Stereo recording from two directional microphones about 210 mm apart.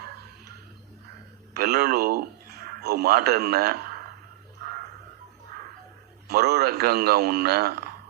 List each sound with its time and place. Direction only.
1.5 s a man's voice: 45° right (ahead or behind)
6.2 s a man's voice: 50° right (ahead or behind)